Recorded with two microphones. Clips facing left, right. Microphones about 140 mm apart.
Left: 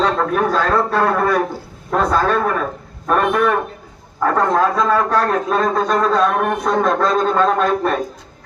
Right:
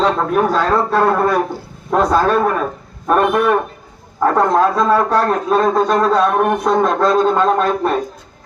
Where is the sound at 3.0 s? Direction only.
10° right (ahead or behind).